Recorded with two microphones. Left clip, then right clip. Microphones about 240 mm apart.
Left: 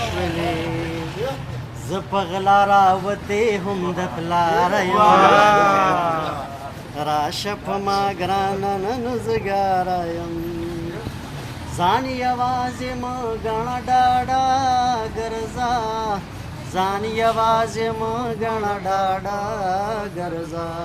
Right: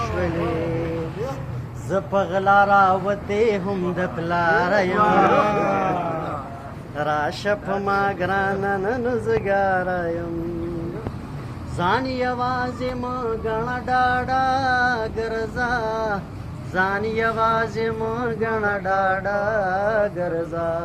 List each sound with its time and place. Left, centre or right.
2.1 s music: left
5.5 s a sound: centre
6.9 s music: centre
11.8 s music: left